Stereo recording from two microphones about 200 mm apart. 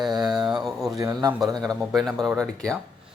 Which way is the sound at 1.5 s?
Centre (ahead or behind).